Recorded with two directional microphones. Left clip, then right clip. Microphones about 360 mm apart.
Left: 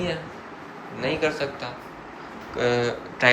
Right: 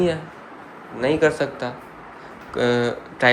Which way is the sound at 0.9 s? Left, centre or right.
Centre.